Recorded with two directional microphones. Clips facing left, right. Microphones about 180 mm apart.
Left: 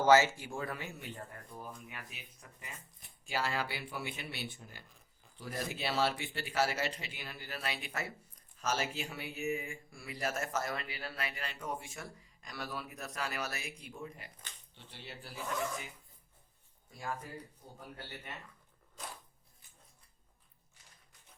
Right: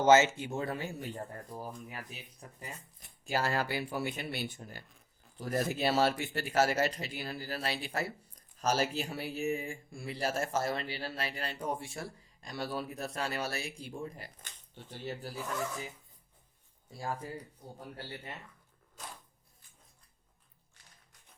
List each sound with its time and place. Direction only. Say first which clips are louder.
0.0 s speech: right 2 dB; 20° right (ahead or behind); by 15.3 s 45° right (ahead or behind)
16.9 s speech: right 3 dB; 30° right (ahead or behind)